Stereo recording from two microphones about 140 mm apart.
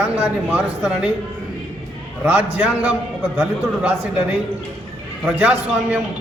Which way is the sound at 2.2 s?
10° right (ahead or behind).